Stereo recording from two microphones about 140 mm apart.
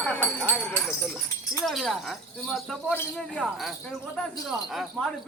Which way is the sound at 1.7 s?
Centre (ahead or behind).